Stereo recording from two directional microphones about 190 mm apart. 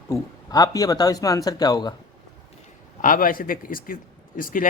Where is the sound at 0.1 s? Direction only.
20° left (ahead or behind).